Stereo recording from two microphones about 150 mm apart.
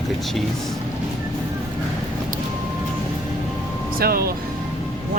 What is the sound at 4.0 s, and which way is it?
Speech, 85° right.